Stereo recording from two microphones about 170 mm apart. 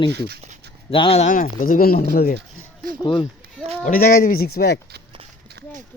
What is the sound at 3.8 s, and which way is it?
Speech, 55° left (ahead or behind).